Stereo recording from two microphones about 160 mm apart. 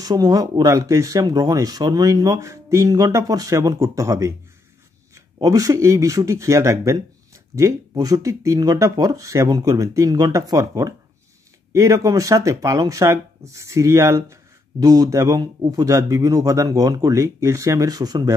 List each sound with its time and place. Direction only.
0.0 s speech: 20° right (ahead or behind)